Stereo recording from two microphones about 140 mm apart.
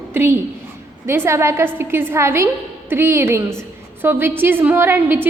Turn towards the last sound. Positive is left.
turn(degrees=-15)  # may be behind; listen again after turning